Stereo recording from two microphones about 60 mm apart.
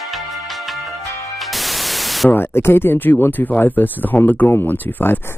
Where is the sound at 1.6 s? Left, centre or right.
Centre.